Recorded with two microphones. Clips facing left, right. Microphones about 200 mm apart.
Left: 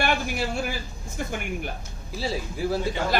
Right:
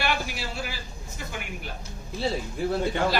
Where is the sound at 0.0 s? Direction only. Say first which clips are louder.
Left 4 dB; 50° left (ahead or behind).